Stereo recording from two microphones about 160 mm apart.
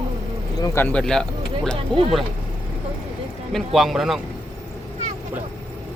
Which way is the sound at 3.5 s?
Centre (ahead or behind).